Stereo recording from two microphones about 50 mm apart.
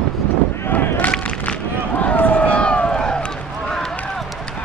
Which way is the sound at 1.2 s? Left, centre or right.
Left.